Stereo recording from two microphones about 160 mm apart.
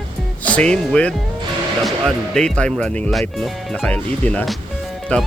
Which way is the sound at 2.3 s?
5° left (ahead or behind).